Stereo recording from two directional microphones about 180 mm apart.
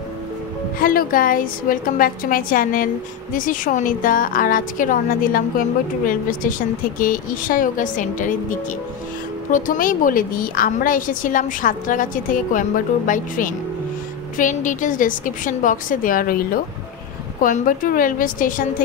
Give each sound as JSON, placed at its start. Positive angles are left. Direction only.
{"t": 0.7, "sound": "a woman's voice", "side_deg": 50}